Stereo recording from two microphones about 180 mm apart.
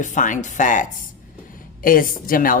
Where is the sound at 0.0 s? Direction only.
45° left (ahead or behind).